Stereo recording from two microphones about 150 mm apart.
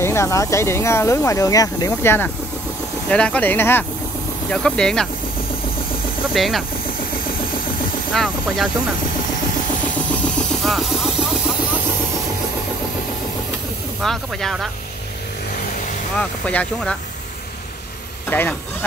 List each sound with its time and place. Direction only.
0.0 s speech: 20° left (ahead or behind)
6.3 s speech: centre (ahead or behind)
8.1 s speech: centre (ahead or behind)
9.8 s a sound: 10° left (ahead or behind)
14.0 s speech: centre (ahead or behind)
16.2 s speech: 10° left (ahead or behind)
18.3 s speech: 15° left (ahead or behind)